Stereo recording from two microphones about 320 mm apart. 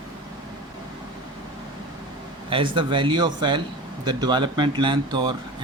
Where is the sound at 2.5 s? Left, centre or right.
Centre.